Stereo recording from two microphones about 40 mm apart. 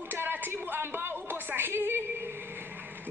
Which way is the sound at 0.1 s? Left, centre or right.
Right.